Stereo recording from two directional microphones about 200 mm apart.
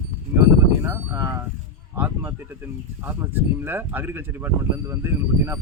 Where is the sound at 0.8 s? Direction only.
10° right (ahead or behind).